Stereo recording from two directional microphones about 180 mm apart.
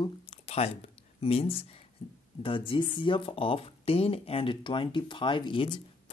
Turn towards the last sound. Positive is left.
turn(degrees=25)  # may be behind; listen again after turning